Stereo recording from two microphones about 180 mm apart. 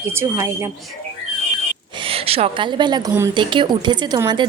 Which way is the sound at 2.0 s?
30° right (ahead or behind).